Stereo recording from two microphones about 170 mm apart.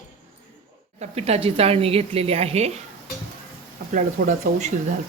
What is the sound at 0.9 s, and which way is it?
A woman's voice, 40° right (ahead or behind).